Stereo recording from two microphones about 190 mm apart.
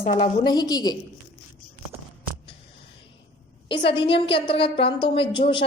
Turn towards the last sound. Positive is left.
turn(degrees=25)  # may be behind; listen again after turning